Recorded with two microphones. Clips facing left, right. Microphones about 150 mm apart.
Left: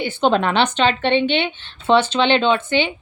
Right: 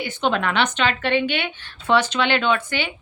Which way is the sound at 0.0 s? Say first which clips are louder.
Left 5 dB; 30° left (ahead or behind).